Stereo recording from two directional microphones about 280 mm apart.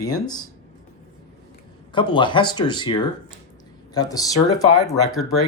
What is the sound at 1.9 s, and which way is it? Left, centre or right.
Speech, centre.